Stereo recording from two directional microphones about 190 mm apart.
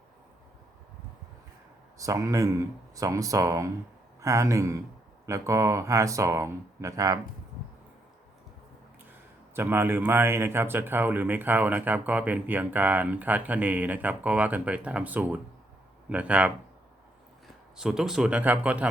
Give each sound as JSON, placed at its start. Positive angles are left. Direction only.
{"t": 2.0, "sound": "speech", "side_deg": -15}
{"t": 9.6, "sound": "speech", "side_deg": -10}
{"t": 17.7, "sound": "speech", "side_deg": -5}